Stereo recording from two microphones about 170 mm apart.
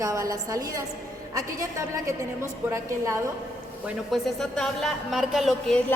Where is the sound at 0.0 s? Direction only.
20° right (ahead or behind).